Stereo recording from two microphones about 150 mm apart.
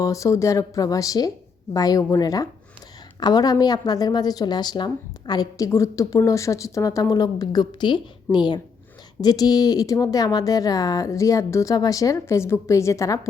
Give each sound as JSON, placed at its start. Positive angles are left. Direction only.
{"t": 0.0, "sound": "a woman's voice", "side_deg": 20}